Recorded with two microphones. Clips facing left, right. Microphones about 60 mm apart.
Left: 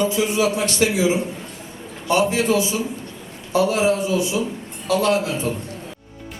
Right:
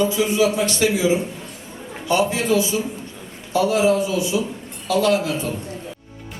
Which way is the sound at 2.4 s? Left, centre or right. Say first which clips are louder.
Even; left.